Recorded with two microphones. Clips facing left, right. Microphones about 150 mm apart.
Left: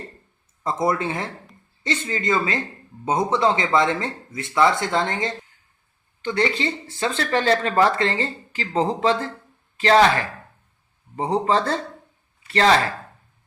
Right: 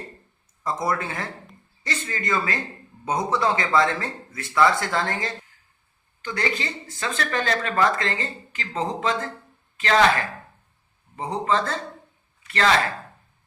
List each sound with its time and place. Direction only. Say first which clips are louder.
0.6 s a man's voice: left 4 dB; 25° left (ahead or behind)